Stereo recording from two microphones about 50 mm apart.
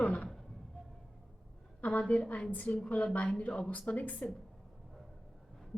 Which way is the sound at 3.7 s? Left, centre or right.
Left.